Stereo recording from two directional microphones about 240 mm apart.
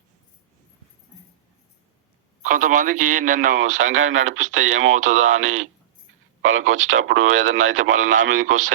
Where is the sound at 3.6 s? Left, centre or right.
Right.